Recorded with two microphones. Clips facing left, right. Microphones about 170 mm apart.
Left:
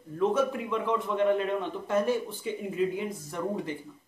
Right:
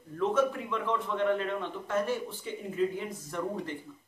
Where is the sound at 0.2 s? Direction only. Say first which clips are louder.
Left 2 dB; 15° left (ahead or behind).